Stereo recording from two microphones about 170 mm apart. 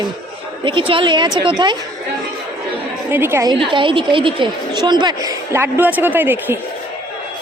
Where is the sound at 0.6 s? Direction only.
30° right (ahead or behind).